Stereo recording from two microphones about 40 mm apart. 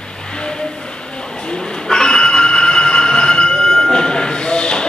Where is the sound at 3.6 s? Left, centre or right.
Centre.